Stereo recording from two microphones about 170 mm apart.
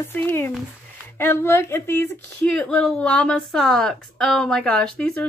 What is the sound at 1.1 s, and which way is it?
A woman's voice, 15° left (ahead or behind).